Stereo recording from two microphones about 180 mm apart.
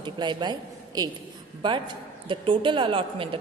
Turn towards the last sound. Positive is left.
turn(degrees=-30)  # may be behind; listen again after turning